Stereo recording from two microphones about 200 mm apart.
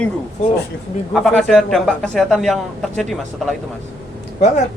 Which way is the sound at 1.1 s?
Centre (ahead or behind).